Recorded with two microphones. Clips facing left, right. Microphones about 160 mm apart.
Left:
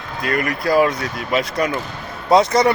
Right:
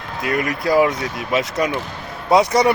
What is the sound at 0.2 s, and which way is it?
A man's voice, 20° right (ahead or behind).